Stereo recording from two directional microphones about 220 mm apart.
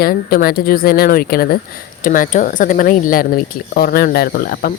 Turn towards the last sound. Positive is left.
turn(degrees=40)  # may be behind; listen again after turning